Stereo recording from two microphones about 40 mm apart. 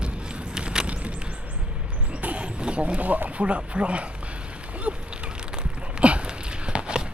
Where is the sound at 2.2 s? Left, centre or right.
Right.